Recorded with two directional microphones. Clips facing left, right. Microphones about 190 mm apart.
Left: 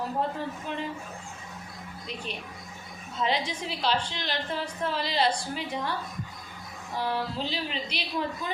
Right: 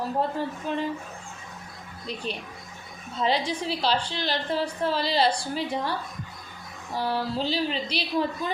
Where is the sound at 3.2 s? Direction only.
35° right (ahead or behind).